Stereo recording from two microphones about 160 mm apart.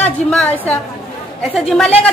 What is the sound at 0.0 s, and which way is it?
Speech, 5° left (ahead or behind).